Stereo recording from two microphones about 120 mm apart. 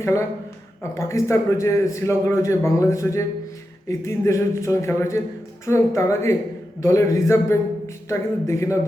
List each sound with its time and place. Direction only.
0.0 s a man's voice: 25° left (ahead or behind)